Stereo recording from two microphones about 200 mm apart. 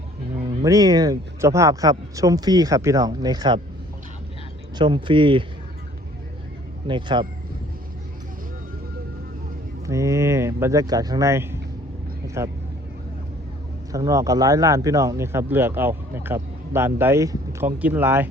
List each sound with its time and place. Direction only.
0.6 s speech: 15° right (ahead or behind)
4.8 s speech: 25° right (ahead or behind)
6.8 s speech: 25° right (ahead or behind)
9.8 s speech: 15° right (ahead or behind)
13.9 s speech: 15° right (ahead or behind)